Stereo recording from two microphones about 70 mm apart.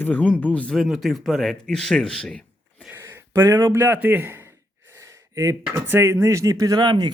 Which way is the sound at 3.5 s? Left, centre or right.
Right.